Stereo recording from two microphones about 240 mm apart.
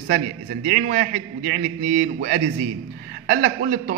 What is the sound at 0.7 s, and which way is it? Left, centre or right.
A man's voice, right.